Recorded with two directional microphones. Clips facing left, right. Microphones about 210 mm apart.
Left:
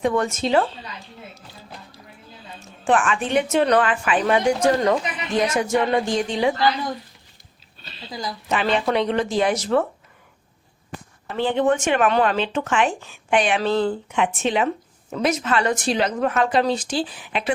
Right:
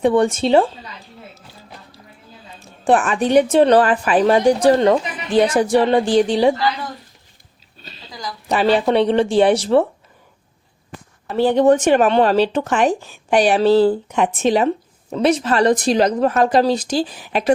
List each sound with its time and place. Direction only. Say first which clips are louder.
0.0 s a woman's voice: right 6 dB; 30° right (ahead or behind)
2.6 s a woman's voice: right 4 dB; 35° right (ahead or behind)
8.4 s a woman's voice: right 6 dB; 35° right (ahead or behind)
11.3 s a woman's voice: right 6 dB; 40° right (ahead or behind)